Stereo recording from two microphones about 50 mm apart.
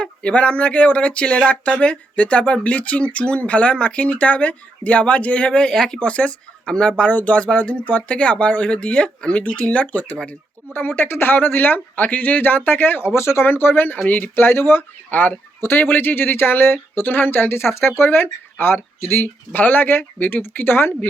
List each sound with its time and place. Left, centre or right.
0.0 s speech: centre
10.2 s speech: left
12.0 s speech: left
13.1 s speech: left
19.2 s speech: left